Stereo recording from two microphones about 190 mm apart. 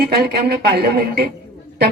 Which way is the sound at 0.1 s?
60° right (ahead or behind).